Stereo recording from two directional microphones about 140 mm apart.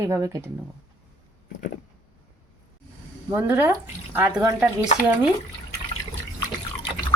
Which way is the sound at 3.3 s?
15° right (ahead or behind).